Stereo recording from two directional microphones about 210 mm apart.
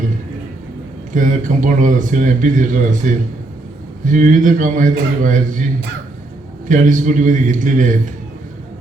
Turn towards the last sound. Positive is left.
turn(degrees=-35)  # may be behind; listen again after turning